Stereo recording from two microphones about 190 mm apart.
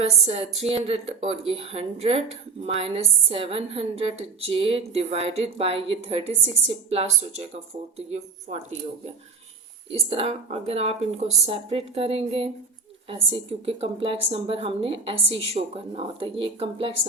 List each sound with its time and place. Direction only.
0.0 s a woman's voice: 35° right (ahead or behind)
9.9 s a woman's voice: 30° right (ahead or behind)
13.7 s a woman's voice: 30° right (ahead or behind)